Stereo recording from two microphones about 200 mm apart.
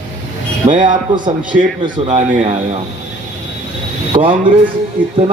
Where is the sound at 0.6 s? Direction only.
40° right (ahead or behind).